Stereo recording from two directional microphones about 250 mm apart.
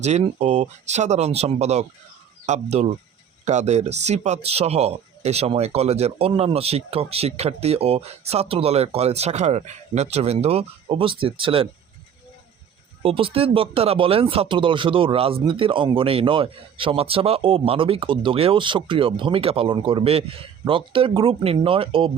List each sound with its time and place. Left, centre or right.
0.0 s speech: right
13.0 s speech: right